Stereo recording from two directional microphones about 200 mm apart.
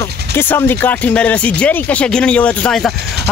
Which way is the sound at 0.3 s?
10° left (ahead or behind).